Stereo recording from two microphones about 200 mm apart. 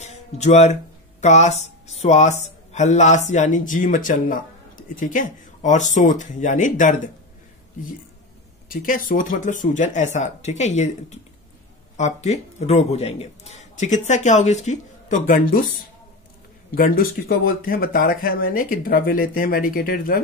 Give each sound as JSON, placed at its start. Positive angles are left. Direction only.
{"t": 0.0, "sound": "a sound", "side_deg": 35}
{"t": 1.2, "sound": "a man's voice", "side_deg": 35}
{"t": 8.6, "sound": "a man's voice", "side_deg": 45}
{"t": 16.7, "sound": "speech", "side_deg": 45}